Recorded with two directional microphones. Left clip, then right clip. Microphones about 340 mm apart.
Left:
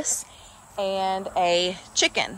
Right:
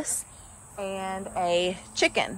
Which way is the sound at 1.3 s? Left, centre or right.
Centre.